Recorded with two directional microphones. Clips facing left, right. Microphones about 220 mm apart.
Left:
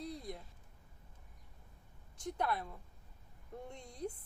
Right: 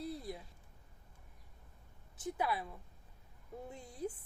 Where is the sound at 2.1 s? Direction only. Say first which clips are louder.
Even; 5° right (ahead or behind).